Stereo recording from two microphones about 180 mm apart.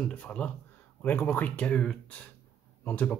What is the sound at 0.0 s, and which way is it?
Speech, 5° left (ahead or behind).